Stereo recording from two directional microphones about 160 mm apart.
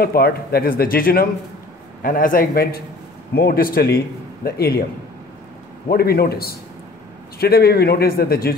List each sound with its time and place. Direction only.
0.0 s a man's voice: 75° left (ahead or behind)
5.9 s speech: 75° left (ahead or behind)